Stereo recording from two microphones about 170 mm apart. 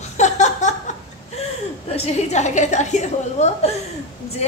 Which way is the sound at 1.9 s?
40° left (ahead or behind).